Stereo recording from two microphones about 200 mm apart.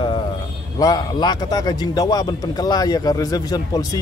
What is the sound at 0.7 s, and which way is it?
A man's voice, 20° left (ahead or behind).